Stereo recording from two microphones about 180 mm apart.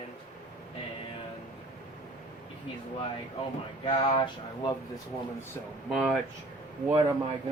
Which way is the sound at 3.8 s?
30° left (ahead or behind).